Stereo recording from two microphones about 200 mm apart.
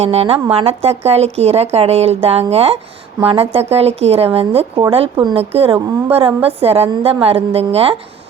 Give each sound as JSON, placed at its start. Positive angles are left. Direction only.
{"t": 0.0, "sound": "a woman's voice", "side_deg": -30}